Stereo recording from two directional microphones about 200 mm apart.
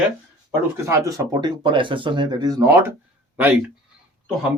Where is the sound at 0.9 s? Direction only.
15° right (ahead or behind).